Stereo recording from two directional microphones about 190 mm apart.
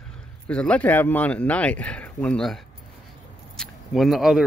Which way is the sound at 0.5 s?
5° left (ahead or behind).